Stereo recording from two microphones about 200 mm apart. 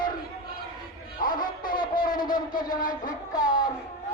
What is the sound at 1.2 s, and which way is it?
Music, 45° left (ahead or behind).